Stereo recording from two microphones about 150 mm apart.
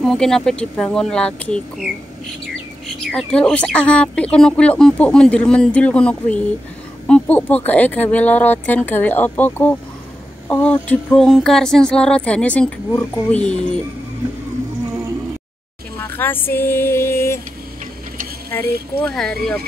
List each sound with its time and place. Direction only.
0.0 s speech: centre (ahead or behind)
3.1 s speech: 5° left (ahead or behind)
16.0 s music: 15° left (ahead or behind)
18.5 s speech: 10° left (ahead or behind)